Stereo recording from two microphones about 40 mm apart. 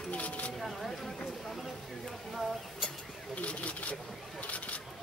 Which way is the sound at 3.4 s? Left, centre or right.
Left.